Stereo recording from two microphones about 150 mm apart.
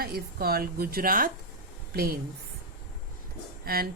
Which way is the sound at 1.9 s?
90° right.